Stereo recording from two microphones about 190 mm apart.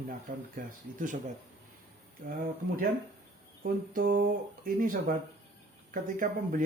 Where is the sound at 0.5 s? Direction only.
45° right (ahead or behind).